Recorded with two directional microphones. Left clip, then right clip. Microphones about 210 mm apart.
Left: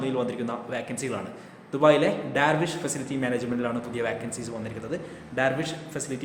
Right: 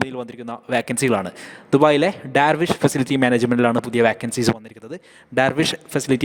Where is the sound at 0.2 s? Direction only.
50° right (ahead or behind).